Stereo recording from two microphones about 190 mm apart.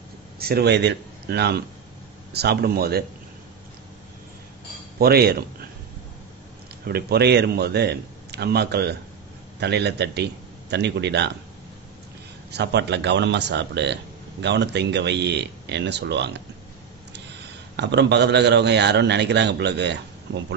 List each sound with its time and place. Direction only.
0.4 s a man's voice: 55° right (ahead or behind)
4.9 s a man's voice: 55° right (ahead or behind)
6.9 s a man's voice: 55° right (ahead or behind)
12.4 s a man's voice: 60° right (ahead or behind)
17.7 s a man's voice: 65° right (ahead or behind)